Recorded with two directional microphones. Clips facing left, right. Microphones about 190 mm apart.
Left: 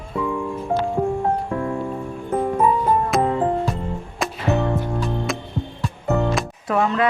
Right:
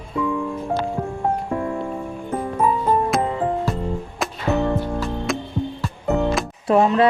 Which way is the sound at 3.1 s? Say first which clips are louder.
Left 2 dB; centre (ahead or behind).